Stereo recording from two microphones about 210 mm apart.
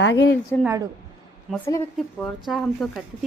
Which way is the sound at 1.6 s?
10° left (ahead or behind).